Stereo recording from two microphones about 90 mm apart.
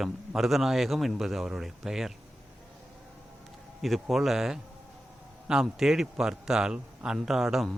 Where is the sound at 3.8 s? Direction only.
Centre (ahead or behind).